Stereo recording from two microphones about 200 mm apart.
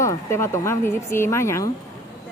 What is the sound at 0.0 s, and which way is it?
Speech, 15° left (ahead or behind).